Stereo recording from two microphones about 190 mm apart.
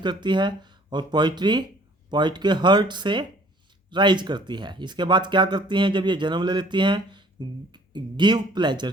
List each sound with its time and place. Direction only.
0.0 s speech: 25° right (ahead or behind)